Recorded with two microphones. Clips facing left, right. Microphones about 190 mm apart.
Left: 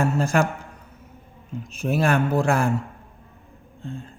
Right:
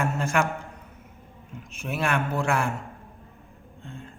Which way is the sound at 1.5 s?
35° left (ahead or behind).